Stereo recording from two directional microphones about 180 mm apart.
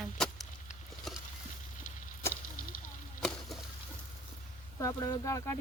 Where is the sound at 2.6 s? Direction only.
50° left (ahead or behind).